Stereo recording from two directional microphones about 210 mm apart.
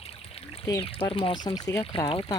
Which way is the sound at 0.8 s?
25° left (ahead or behind).